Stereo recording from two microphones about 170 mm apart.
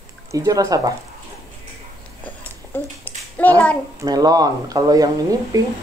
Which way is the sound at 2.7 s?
10° left (ahead or behind).